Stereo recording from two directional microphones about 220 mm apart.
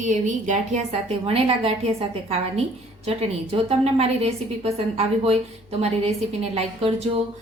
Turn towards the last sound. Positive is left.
turn(degrees=-25)  # may be behind; listen again after turning